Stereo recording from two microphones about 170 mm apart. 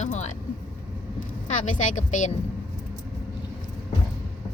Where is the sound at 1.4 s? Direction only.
45° left (ahead or behind).